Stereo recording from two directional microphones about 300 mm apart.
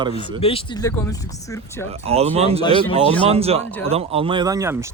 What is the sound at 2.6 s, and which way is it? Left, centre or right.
Speech, centre.